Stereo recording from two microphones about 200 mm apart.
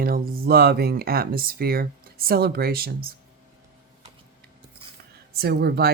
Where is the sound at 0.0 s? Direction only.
45° right (ahead or behind).